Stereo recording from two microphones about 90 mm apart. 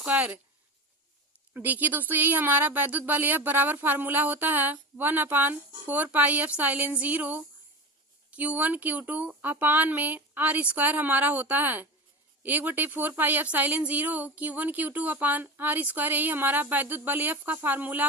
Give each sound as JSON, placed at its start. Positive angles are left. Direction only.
{"t": 0.0, "sound": "speech", "side_deg": -15}
{"t": 1.5, "sound": "speech", "side_deg": -20}